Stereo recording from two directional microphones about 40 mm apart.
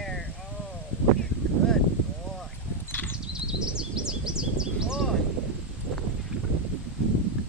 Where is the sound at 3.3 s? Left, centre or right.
Centre.